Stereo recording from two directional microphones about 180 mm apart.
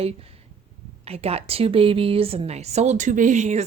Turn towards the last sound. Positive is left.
turn(degrees=-40)  # may be behind; listen again after turning